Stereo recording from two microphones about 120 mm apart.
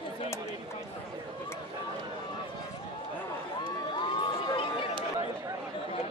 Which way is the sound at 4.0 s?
45° left (ahead or behind).